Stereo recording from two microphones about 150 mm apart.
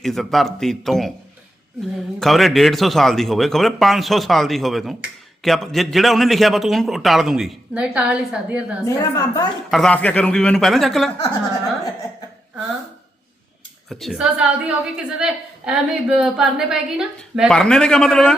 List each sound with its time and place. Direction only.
0.0 s speech: centre (ahead or behind)
2.1 s speech: centre (ahead or behind)
8.8 s a woman's voice: 20° left (ahead or behind)
9.6 s speech: centre (ahead or behind)
13.9 s speech: centre (ahead or behind)